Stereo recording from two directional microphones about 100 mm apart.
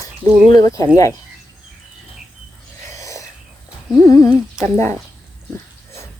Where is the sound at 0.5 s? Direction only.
35° left (ahead or behind).